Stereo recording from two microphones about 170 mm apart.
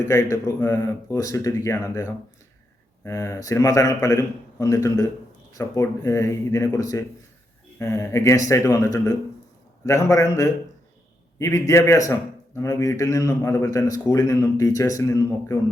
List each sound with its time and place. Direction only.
0.0 s a man's voice: 15° left (ahead or behind)